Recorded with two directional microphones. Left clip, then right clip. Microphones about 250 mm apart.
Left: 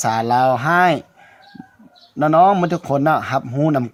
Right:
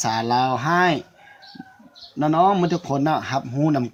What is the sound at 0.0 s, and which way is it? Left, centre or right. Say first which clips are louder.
Speech: left 5 dB; left.